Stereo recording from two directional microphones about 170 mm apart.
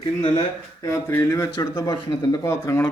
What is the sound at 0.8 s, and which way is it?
Speech, 15° left (ahead or behind).